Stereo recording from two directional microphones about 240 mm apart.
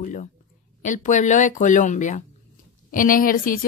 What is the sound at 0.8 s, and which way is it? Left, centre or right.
Speech, left.